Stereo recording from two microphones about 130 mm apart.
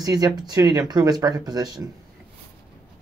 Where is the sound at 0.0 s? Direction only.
30° right (ahead or behind).